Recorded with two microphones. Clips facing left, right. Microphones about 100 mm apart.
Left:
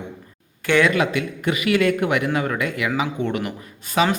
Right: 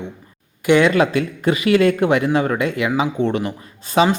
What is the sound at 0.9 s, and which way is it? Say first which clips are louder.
Speech: right 4 dB; 35° right (ahead or behind).